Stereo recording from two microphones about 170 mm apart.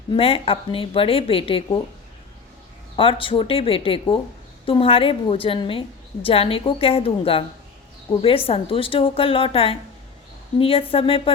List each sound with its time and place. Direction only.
0.1 s a woman's voice: 35° left (ahead or behind)
2.9 s a woman's voice: 30° left (ahead or behind)